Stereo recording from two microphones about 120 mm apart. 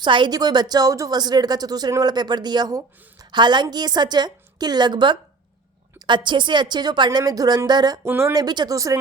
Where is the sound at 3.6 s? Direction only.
35° right (ahead or behind).